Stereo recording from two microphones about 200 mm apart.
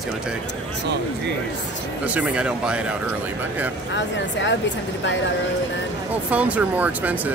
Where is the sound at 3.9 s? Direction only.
65° left (ahead or behind).